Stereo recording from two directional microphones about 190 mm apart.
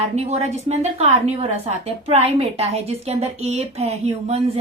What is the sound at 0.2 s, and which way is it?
A woman's voice, 35° right (ahead or behind).